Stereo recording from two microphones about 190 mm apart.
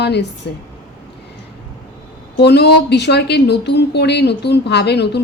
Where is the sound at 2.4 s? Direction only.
60° left (ahead or behind).